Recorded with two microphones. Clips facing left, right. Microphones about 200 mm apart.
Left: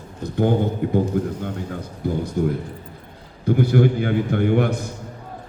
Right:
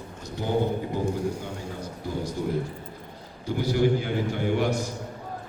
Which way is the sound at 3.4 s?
55° left (ahead or behind).